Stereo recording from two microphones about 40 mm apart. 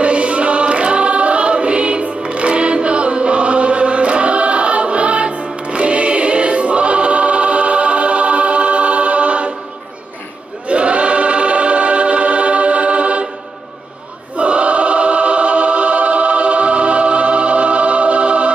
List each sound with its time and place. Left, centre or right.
0.0 s choir: right
10.7 s choir: right
14.3 s choir: right